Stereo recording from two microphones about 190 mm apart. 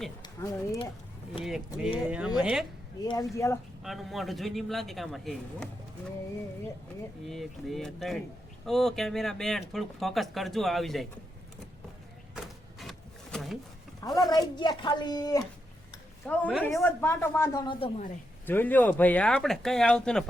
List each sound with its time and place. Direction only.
0.2 s speech: 15° left (ahead or behind)
1.5 s speech: 5° right (ahead or behind)
3.0 s speech: 20° left (ahead or behind)
3.8 s speech: centre (ahead or behind)
7.3 s speech: centre (ahead or behind)
12.8 s a sound: centre (ahead or behind)
14.3 s a woman's voice: 20° left (ahead or behind)
16.2 s speech: 10° left (ahead or behind); by 18.0 s 30° left (ahead or behind)
18.4 s speech: 10° left (ahead or behind)